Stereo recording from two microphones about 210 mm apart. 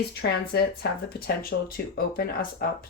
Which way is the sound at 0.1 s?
50° left (ahead or behind).